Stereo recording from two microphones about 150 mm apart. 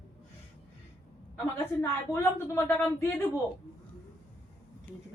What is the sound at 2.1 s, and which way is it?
Speech, 15° left (ahead or behind).